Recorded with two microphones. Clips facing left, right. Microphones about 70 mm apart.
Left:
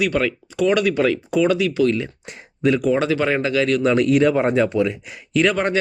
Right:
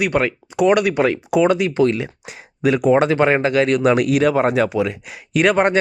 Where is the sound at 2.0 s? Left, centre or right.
Centre.